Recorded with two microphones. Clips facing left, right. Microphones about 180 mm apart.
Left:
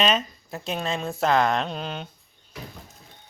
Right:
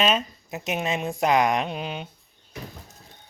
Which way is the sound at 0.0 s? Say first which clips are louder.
Even; 10° right (ahead or behind).